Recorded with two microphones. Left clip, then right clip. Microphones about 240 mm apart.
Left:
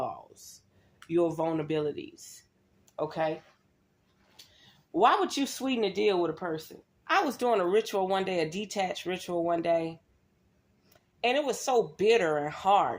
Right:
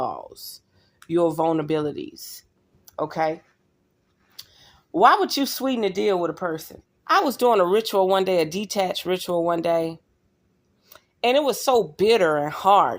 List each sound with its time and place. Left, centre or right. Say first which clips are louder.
0.9 s speech: right 7 dB; right
4.6 s speech: right 8 dB; right